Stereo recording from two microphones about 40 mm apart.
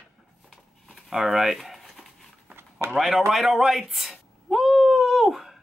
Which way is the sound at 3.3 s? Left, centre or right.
Centre.